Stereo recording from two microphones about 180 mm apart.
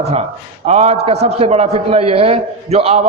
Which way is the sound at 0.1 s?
35° right (ahead or behind).